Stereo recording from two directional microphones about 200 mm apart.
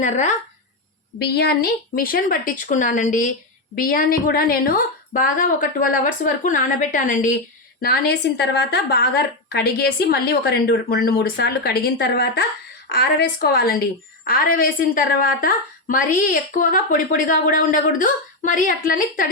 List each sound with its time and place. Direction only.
0.0 s a woman's voice: 35° left (ahead or behind)
1.2 s a woman's voice: 55° left (ahead or behind)
7.8 s a woman's voice: 50° left (ahead or behind)